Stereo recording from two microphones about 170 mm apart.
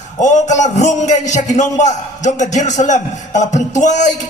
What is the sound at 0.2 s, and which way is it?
A man's voice, 45° left (ahead or behind).